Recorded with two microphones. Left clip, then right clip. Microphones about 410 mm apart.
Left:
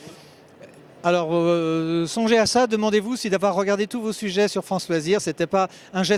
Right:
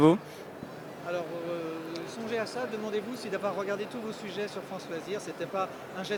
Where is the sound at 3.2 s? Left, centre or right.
Left.